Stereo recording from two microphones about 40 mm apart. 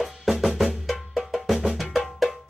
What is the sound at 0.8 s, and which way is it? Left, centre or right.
Music, centre.